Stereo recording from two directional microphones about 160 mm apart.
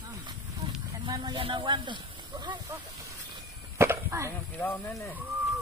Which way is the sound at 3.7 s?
15° right (ahead or behind).